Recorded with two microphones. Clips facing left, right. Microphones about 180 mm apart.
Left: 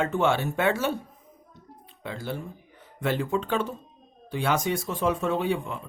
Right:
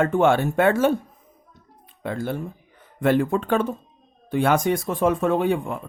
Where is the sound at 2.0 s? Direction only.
50° right (ahead or behind).